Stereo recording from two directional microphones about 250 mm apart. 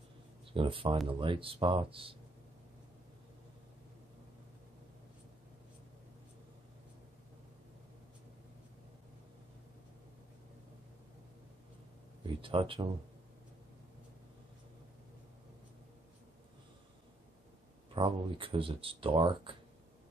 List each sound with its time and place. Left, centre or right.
0.5 s speech: right
12.2 s speech: right
17.9 s speech: centre